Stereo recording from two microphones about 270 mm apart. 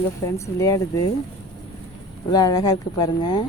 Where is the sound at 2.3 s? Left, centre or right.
Centre.